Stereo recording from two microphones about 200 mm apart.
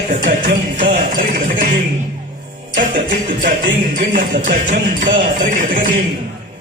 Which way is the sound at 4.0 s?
40° right (ahead or behind).